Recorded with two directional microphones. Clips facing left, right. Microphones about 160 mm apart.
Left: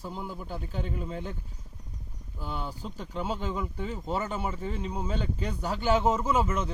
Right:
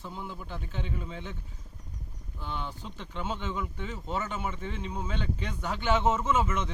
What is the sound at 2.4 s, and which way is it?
Speech, 40° left (ahead or behind).